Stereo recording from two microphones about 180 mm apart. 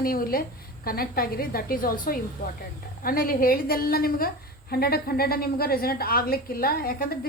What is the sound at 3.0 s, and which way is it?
A woman's voice, 55° left (ahead or behind).